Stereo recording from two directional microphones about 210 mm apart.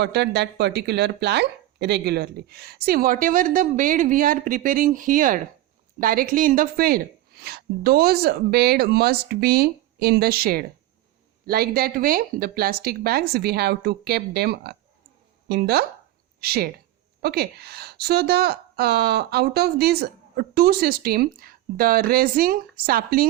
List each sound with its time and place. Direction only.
0.0 s a woman's voice: 55° right (ahead or behind)